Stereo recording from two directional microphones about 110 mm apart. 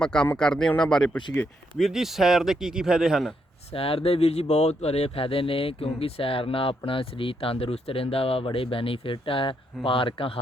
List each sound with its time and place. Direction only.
0.0 s speech: 5° left (ahead or behind)
3.7 s speech: 60° left (ahead or behind)